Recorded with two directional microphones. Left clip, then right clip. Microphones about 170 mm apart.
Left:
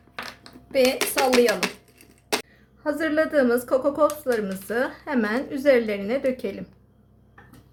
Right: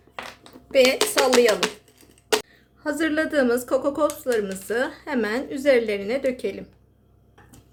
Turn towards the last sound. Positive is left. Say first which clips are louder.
# right 1 dB
turn(degrees=0)  # may be behind; listen again after turning